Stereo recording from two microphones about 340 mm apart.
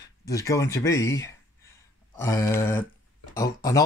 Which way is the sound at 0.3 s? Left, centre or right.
Centre.